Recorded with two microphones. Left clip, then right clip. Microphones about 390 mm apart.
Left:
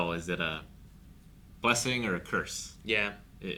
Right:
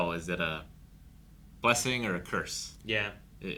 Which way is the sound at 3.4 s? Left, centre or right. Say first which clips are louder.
Left 1 dB; centre.